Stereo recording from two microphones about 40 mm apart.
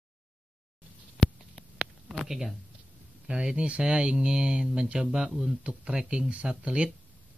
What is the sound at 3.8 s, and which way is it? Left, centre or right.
Speech, centre.